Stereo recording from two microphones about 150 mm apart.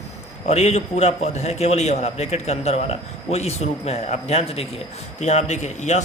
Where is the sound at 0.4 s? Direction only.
45° left (ahead or behind).